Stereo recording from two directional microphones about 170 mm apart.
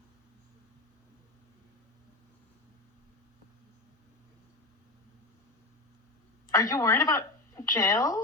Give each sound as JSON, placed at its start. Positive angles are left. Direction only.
{"t": 6.5, "sound": "speech", "side_deg": 20}